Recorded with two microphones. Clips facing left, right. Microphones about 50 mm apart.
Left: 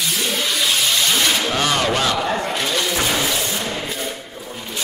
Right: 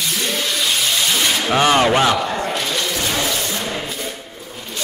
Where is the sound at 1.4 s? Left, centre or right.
Right.